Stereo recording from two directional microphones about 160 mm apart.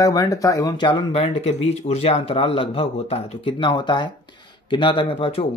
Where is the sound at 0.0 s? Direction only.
20° left (ahead or behind).